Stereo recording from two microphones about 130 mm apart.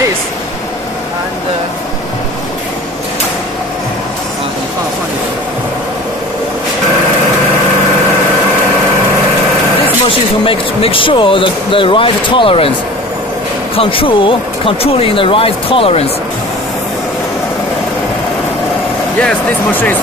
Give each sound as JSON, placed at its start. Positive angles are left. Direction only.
{"t": 10.0, "sound": "speech", "side_deg": 45}
{"t": 13.7, "sound": "speech", "side_deg": 45}
{"t": 19.1, "sound": "speech", "side_deg": 10}